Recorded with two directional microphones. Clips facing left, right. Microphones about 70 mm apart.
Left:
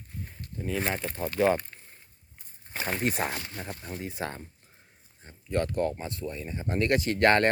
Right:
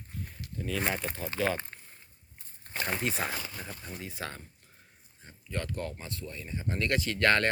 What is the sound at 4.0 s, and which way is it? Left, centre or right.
Speech, left.